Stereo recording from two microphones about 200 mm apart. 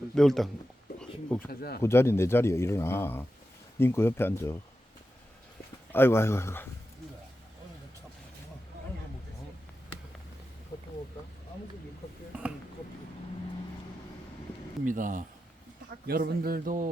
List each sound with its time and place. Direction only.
0.1 s speech: centre (ahead or behind)
0.9 s a sound: 5° left (ahead or behind)
1.5 s speech: 50° left (ahead or behind)
1.8 s a man's voice: 10° left (ahead or behind)
5.9 s a man's voice: 10° left (ahead or behind)
12.3 s a sound: 10° right (ahead or behind)
14.8 s speech: 40° right (ahead or behind)